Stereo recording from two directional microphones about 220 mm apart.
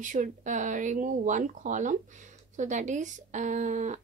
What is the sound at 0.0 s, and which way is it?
Speech, 35° right (ahead or behind).